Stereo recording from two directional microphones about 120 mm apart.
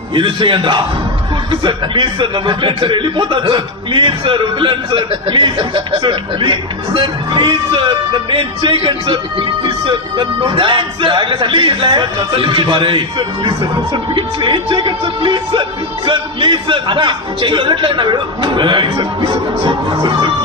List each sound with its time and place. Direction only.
0.1 s a man's voice: 45° right (ahead or behind)